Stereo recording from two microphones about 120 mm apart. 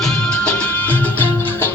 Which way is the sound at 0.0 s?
5° left (ahead or behind).